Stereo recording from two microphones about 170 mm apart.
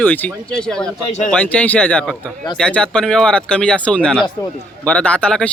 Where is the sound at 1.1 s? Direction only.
45° left (ahead or behind).